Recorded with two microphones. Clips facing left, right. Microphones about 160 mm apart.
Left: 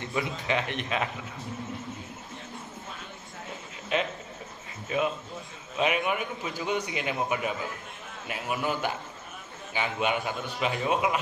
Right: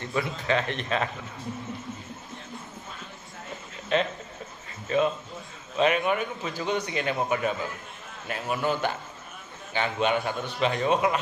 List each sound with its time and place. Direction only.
0.0 s a man's voice: 15° left (ahead or behind)
3.9 s a man's voice: 10° left (ahead or behind)